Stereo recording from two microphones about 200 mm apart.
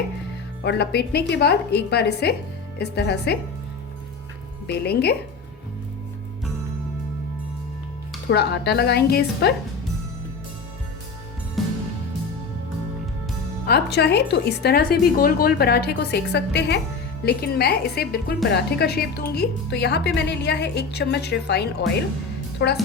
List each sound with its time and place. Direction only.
0.6 s a woman's voice: 55° left (ahead or behind)
4.6 s a woman's voice: 55° left (ahead or behind)
8.3 s a woman's voice: 55° left (ahead or behind)
11.6 s music: centre (ahead or behind)
13.7 s a woman's voice: 55° left (ahead or behind)